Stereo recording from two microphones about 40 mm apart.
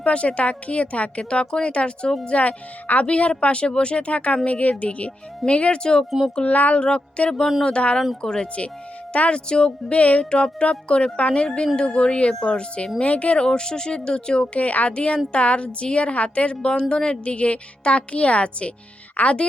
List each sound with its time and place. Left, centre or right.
0.0 s speech: left
6.4 s speech: left
6.8 s speech: left
13.4 s speech: centre